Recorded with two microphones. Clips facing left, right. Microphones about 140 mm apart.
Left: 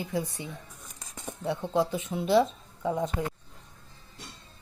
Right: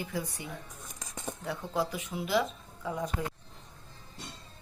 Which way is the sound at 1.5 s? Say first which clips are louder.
Left 6 dB; 25° left (ahead or behind).